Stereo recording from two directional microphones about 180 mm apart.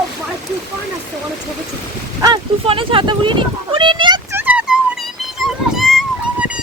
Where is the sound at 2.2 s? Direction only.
25° right (ahead or behind).